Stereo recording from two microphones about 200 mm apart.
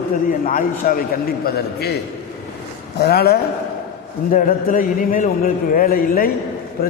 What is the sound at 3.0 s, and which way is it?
A man's voice, 50° left (ahead or behind).